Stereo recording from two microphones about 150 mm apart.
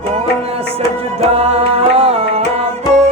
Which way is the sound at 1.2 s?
40° right (ahead or behind).